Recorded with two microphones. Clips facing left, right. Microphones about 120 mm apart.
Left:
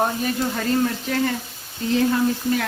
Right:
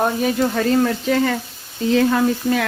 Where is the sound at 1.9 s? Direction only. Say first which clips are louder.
Right 3 dB; 90° right.